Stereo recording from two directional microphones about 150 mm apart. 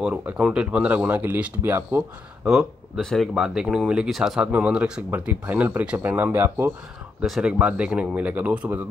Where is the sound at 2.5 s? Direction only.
Centre (ahead or behind); by 6.7 s 15° right (ahead or behind).